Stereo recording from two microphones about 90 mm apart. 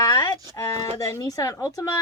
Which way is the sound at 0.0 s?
40° left (ahead or behind).